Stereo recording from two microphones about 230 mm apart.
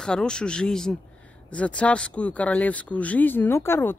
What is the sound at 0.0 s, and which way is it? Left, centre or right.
Speech, centre.